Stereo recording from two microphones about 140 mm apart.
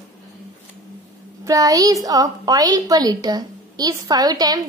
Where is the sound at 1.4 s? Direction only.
25° right (ahead or behind).